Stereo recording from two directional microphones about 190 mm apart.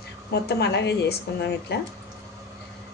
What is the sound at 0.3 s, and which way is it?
Speech, 60° left (ahead or behind).